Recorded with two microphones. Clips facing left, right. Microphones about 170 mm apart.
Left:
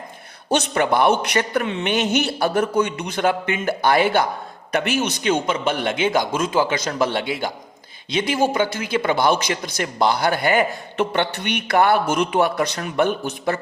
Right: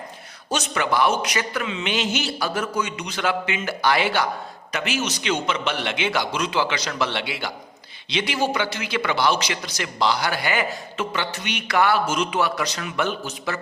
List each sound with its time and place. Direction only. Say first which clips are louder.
0.7 s a man's voice: left 3 dB; 50° left (ahead or behind)